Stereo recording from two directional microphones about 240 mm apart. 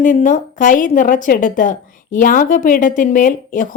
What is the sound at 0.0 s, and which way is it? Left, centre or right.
Speech, left.